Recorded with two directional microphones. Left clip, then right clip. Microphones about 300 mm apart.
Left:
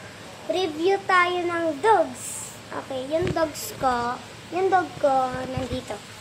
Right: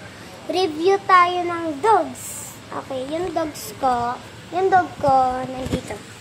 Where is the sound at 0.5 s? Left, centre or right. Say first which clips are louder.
Right 4 dB; centre.